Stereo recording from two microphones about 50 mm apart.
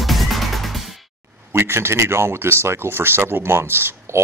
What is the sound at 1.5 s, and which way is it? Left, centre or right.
Speech, right.